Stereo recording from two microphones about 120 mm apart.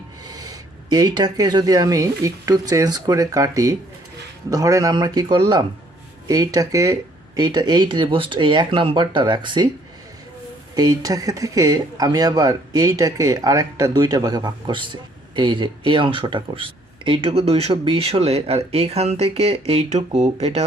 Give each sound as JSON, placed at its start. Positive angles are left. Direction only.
{"t": 0.3, "sound": "speech", "side_deg": -35}
{"t": 10.8, "sound": "speech", "side_deg": -30}